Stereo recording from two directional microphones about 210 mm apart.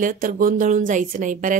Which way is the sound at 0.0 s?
40° right (ahead or behind).